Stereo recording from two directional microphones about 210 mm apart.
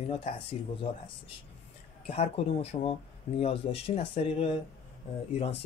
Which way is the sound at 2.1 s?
30° left (ahead or behind).